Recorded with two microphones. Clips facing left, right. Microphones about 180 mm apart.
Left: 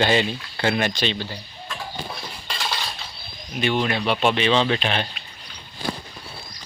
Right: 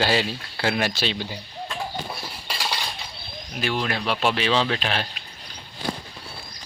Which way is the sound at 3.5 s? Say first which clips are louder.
Left 4 dB; centre (ahead or behind).